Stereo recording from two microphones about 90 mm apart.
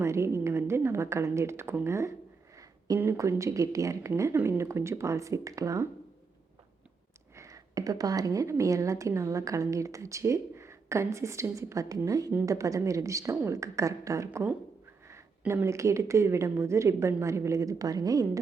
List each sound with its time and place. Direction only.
0.0 s a woman's voice: 30° right (ahead or behind)
2.6 s a sound: 40° right (ahead or behind)
3.2 s a woman's voice: 35° right (ahead or behind)
7.3 s a woman's voice: 35° right (ahead or behind)